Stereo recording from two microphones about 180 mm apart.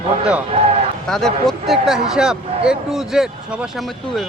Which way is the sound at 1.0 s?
Centre (ahead or behind).